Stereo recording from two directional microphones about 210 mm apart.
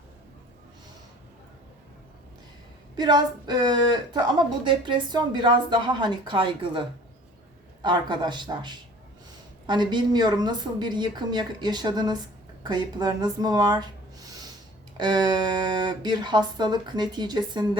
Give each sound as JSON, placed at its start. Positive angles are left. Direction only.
{"t": 2.9, "sound": "speech", "side_deg": -20}
{"t": 14.9, "sound": "speech", "side_deg": -20}